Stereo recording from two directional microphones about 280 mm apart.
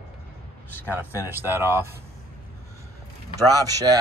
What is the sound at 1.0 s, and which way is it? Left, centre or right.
Speech, centre.